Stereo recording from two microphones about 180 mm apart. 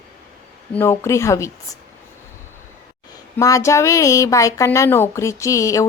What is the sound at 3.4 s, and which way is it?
Speech, 20° left (ahead or behind).